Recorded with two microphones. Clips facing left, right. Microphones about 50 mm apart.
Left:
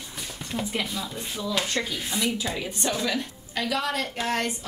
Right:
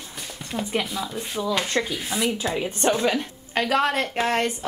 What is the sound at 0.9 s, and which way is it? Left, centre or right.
Speech, centre.